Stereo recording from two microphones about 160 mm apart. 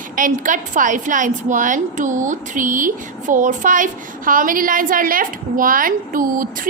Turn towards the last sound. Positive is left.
turn(degrees=-60)  # may be behind; listen again after turning